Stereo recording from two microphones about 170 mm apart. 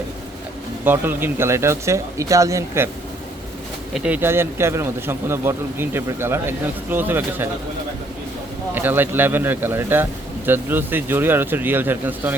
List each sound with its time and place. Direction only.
0.9 s speech: 10° right (ahead or behind)
3.9 s speech: 5° right (ahead or behind)
8.7 s speech: 10° right (ahead or behind)